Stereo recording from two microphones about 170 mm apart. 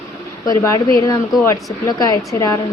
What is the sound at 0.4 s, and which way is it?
A woman's voice, 20° left (ahead or behind).